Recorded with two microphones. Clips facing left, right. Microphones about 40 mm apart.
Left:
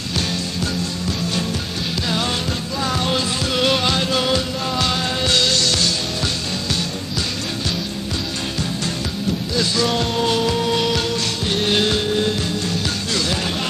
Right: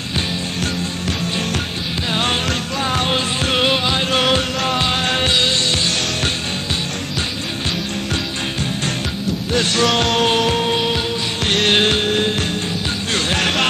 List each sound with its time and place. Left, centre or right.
2.8 s music: right
3.6 s music: right
4.2 s music: right
5.4 s music: right
9.5 s music: right
9.8 s music: right
10.2 s music: right
10.7 s music: right
11.4 s music: right
11.7 s music: right
13.4 s music: right